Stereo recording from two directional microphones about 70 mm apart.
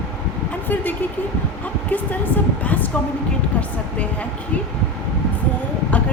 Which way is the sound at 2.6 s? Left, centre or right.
Left.